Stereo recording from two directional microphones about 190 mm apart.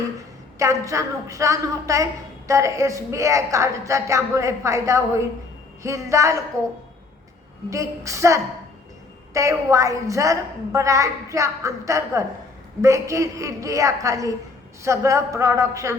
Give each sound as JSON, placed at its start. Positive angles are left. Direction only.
{"t": 0.6, "sound": "a woman's voice", "side_deg": -15}
{"t": 7.7, "sound": "a woman's voice", "side_deg": -15}